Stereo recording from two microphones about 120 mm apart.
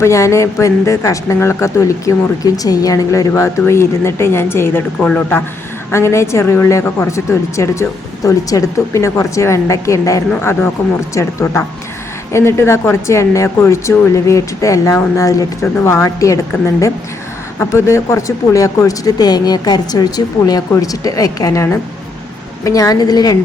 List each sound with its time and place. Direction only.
0.0 s speech: 25° left (ahead or behind)
4.9 s speech: 10° left (ahead or behind)
5.9 s a woman's voice: 25° left (ahead or behind)